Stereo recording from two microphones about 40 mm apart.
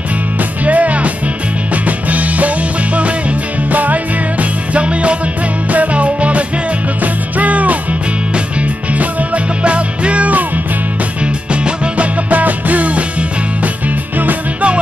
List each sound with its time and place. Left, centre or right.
0.7 s music: right
8.9 s music: right
11.6 s music: right
12.3 s music: right